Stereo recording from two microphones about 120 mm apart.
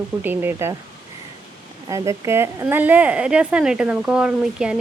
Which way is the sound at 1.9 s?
25° right (ahead or behind).